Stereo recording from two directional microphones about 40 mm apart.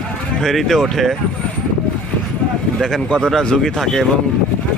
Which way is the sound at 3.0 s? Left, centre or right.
Centre.